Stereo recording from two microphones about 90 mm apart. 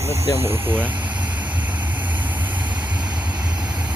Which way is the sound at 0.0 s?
30° right (ahead or behind).